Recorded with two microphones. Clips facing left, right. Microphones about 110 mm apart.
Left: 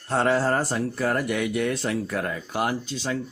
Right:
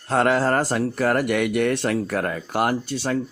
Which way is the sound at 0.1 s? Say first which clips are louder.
Right 3 dB; 80° right.